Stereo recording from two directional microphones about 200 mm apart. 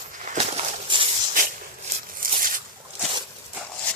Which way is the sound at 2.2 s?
45° right (ahead or behind).